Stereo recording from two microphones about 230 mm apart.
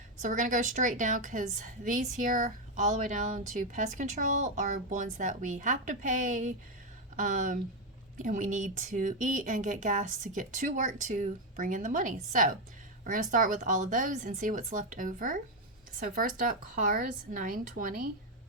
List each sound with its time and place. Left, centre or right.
0.2 s speech: right